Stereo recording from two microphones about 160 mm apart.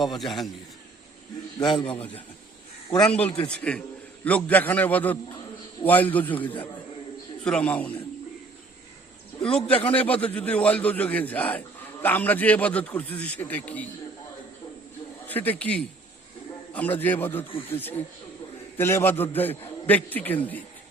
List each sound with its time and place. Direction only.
0.0 s a man's voice: centre (ahead or behind)
1.5 s a man's voice: 30° left (ahead or behind)
1.8 s a man's voice: 10° left (ahead or behind)
7.4 s a man's voice: 5° left (ahead or behind)
9.4 s a man's voice: 5° left (ahead or behind)
15.3 s a man's voice: 10° left (ahead or behind)